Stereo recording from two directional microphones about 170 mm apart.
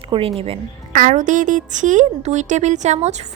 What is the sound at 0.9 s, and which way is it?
Speech, 45° right (ahead or behind).